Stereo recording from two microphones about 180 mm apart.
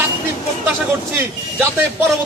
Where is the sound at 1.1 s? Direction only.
15° right (ahead or behind).